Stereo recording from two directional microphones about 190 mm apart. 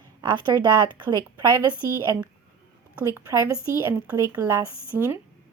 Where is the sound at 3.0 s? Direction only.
15° right (ahead or behind).